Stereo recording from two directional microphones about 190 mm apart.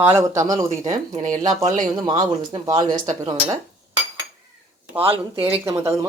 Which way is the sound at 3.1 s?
30° right (ahead or behind).